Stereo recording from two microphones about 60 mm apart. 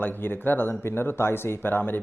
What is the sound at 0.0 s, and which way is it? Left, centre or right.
Speech, left.